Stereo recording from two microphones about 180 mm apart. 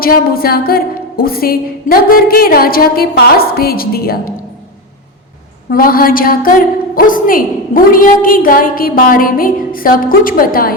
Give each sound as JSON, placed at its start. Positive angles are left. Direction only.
{"t": 0.0, "sound": "a woman's voice", "side_deg": 55}
{"t": 5.7, "sound": "a woman's voice", "side_deg": 55}